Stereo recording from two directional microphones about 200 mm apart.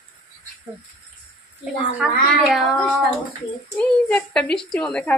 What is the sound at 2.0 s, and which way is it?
A woman's voice, centre (ahead or behind).